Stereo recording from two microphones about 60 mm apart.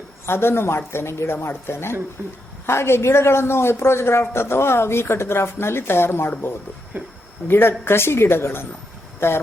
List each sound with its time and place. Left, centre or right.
0.3 s speech: left
2.2 s a woman's voice: right
2.6 s speech: left
6.9 s speech: right
7.4 s speech: left